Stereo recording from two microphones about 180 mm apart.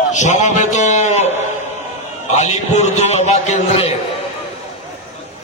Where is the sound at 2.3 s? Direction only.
40° left (ahead or behind).